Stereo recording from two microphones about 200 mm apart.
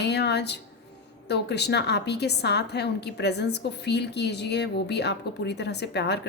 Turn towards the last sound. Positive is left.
turn(degrees=55)  # may be behind; listen again after turning